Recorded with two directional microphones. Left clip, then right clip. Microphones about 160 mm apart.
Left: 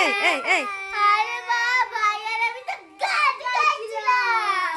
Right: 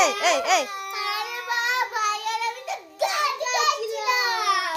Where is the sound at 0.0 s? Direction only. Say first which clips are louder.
Even; 10° left (ahead or behind).